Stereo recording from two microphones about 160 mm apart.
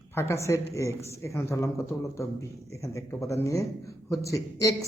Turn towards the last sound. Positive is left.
turn(degrees=20)  # may be behind; listen again after turning